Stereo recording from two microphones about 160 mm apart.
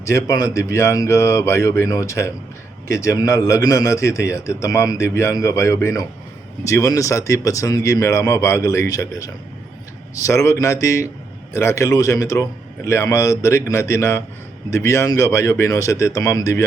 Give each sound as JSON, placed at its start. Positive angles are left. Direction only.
{"t": 0.0, "sound": "a man's voice", "side_deg": 20}